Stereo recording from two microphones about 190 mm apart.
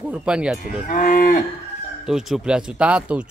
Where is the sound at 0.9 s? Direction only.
45° left (ahead or behind).